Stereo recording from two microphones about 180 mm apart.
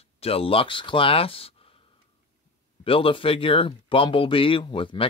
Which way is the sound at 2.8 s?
30° left (ahead or behind).